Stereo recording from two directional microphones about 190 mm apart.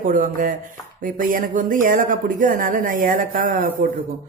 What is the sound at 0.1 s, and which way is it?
Speech, 45° right (ahead or behind).